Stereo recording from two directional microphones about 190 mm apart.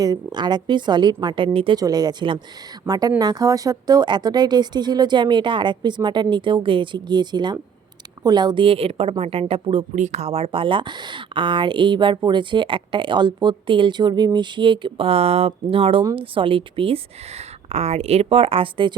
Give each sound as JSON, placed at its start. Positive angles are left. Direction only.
{"t": 0.0, "sound": "a woman's voice", "side_deg": -20}